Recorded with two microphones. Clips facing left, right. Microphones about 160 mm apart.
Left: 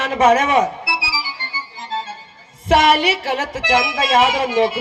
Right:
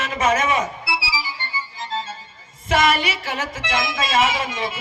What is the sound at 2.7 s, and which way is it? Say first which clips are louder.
Speech: left 5 dB; 70° left (ahead or behind).